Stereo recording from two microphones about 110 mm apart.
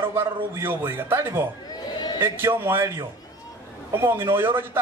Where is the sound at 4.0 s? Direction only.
20° right (ahead or behind).